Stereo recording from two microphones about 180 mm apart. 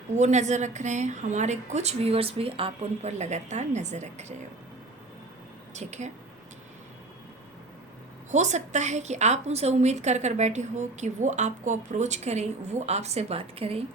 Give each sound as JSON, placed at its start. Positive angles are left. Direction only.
{"t": 0.1, "sound": "a woman's voice", "side_deg": -40}
{"t": 5.7, "sound": "a woman's voice", "side_deg": -40}
{"t": 8.3, "sound": "a woman's voice", "side_deg": -40}